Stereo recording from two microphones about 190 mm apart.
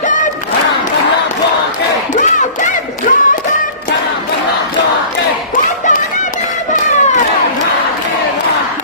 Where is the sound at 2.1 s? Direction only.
40° left (ahead or behind).